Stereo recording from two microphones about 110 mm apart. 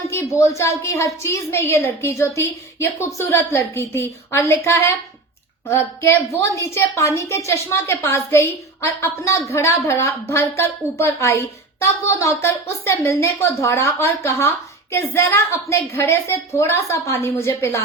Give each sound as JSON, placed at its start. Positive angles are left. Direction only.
{"t": 0.1, "sound": "a woman's voice", "side_deg": 25}